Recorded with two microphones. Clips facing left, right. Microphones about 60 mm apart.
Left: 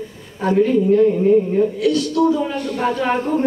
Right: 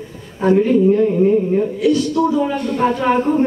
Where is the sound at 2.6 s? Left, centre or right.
Right.